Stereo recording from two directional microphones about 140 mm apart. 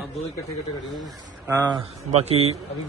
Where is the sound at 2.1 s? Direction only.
50° right (ahead or behind).